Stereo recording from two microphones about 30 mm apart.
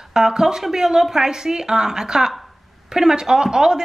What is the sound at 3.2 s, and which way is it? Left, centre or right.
Speech, right.